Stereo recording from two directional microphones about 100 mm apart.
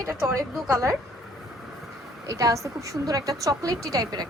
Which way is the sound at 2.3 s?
30° right (ahead or behind).